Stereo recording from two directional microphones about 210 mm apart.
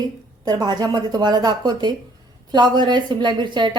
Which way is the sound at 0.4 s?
20° right (ahead or behind).